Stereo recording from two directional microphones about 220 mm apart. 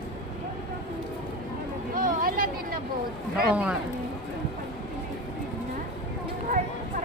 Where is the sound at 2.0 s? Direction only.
40° right (ahead or behind).